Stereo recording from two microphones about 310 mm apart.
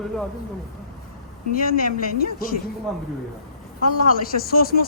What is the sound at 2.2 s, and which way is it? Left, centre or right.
Speech, left.